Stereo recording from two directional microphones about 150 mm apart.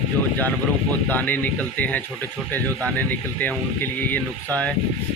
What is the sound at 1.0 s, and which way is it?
A man's voice, 10° left (ahead or behind).